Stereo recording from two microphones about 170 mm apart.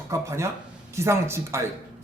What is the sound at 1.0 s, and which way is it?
Speech, 15° right (ahead or behind).